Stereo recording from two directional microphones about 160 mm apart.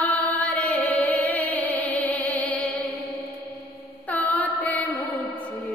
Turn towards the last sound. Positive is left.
turn(degrees=10)  # may be behind; listen again after turning